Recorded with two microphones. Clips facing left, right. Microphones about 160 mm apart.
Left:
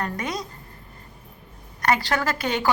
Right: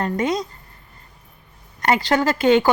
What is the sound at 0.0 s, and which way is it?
Speech, 25° right (ahead or behind).